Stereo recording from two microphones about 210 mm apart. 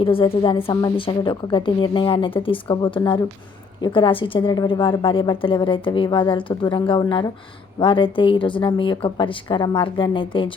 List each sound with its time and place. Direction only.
0.0 s a woman's voice: 25° left (ahead or behind)